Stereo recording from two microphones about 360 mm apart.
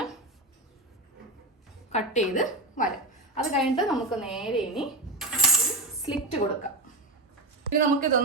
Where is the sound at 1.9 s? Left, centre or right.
Centre.